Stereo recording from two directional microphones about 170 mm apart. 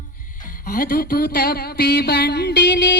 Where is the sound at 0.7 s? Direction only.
60° left (ahead or behind).